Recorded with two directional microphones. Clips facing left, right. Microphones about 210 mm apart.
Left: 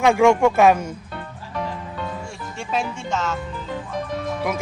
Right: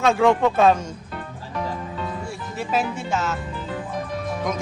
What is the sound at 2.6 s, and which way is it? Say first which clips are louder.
Speech: right 2 dB; 5° right (ahead or behind).